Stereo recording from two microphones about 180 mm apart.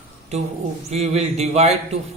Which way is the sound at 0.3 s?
35° right (ahead or behind).